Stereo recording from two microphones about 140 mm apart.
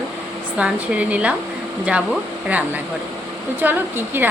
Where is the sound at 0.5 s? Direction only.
10° right (ahead or behind).